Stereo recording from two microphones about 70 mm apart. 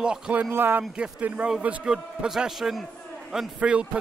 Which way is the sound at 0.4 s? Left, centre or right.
Right.